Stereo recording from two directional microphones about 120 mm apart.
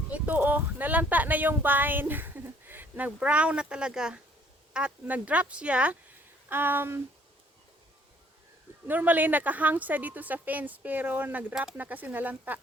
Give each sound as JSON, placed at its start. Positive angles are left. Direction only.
{"t": 0.1, "sound": "a woman's voice", "side_deg": -10}
{"t": 8.9, "sound": "a woman's voice", "side_deg": -15}